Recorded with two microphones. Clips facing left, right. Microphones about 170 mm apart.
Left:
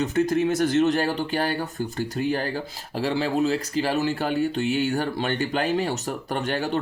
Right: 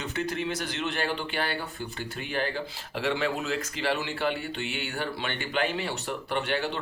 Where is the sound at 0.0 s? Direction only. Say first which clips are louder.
Left 9 dB; 45° left (ahead or behind).